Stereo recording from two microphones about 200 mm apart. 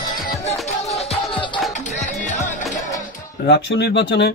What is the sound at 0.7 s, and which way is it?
Music, 30° left (ahead or behind).